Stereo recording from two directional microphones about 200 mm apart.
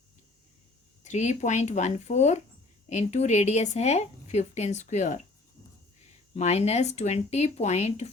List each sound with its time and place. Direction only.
1.0 s a woman's voice: 35° left (ahead or behind)
6.3 s a woman's voice: 35° left (ahead or behind)